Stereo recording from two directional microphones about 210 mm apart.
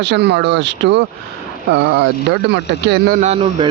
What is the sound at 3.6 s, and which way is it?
Speech, 20° right (ahead or behind).